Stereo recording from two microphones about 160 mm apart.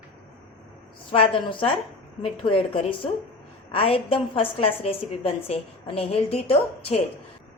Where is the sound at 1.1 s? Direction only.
30° left (ahead or behind).